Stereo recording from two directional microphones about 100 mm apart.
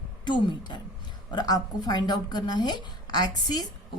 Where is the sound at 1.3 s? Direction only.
45° left (ahead or behind).